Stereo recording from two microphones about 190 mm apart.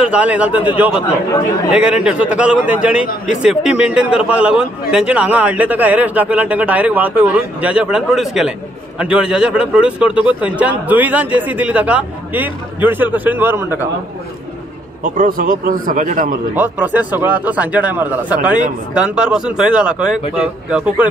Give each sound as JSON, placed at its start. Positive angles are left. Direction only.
{"t": 0.0, "sound": "a man's voice", "side_deg": -5}
{"t": 15.1, "sound": "a man's voice", "side_deg": -45}
{"t": 16.5, "sound": "a man's voice", "side_deg": -10}